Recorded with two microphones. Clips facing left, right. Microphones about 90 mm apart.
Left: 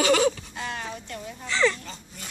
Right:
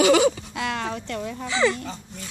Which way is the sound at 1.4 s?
5° right (ahead or behind).